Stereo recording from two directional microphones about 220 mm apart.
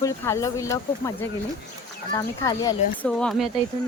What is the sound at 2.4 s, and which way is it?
Speech, 15° left (ahead or behind).